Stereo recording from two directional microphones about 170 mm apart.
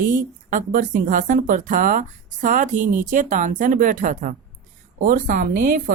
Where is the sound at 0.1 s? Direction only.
50° right (ahead or behind).